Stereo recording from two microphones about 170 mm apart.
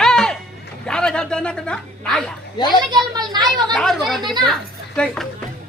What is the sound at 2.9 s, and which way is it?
Speech, 25° right (ahead or behind).